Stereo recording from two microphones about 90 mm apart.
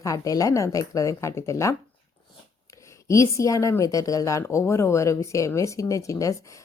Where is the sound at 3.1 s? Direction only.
35° left (ahead or behind).